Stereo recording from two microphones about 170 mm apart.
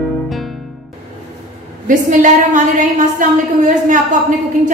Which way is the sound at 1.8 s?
50° right (ahead or behind).